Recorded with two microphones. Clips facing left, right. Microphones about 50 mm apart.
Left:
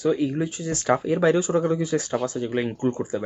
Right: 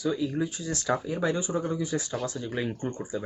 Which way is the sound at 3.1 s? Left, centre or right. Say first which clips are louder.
Left 5 dB; left.